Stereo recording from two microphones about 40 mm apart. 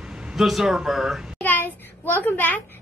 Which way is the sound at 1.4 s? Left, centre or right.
Left.